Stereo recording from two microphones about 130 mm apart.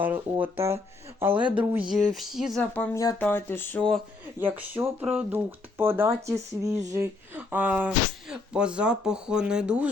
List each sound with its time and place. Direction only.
0.4 s speech: 20° right (ahead or behind); by 2.6 s centre (ahead or behind)
2.9 s speech: 25° left (ahead or behind)
3.2 s a sound: 15° left (ahead or behind)
3.8 s speech: 5° left (ahead or behind)
4.4 s speech: 15° right (ahead or behind)